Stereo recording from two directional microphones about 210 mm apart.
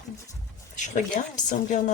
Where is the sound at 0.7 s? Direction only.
35° left (ahead or behind).